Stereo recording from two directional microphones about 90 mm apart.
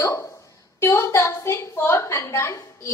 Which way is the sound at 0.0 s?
35° left (ahead or behind).